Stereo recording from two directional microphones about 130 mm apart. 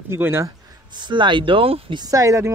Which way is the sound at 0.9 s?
35° right (ahead or behind).